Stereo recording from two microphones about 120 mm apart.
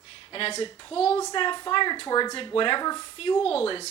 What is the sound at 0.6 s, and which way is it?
A woman's voice, 45° left (ahead or behind).